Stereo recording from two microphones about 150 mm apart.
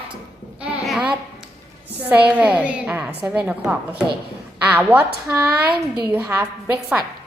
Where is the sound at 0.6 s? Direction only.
5° right (ahead or behind).